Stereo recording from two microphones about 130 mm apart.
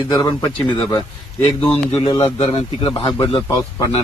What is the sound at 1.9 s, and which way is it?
A man's voice, 45° left (ahead or behind).